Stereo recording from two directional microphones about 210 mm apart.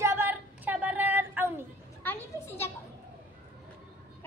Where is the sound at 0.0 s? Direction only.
10° right (ahead or behind).